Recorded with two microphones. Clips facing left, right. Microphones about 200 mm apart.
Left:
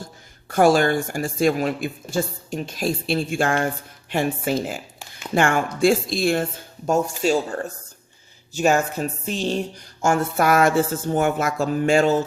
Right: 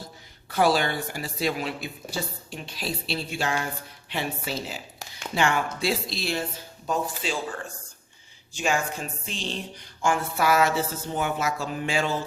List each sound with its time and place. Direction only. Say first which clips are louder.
0.0 s speech: left 4 dB; 50° left (ahead or behind)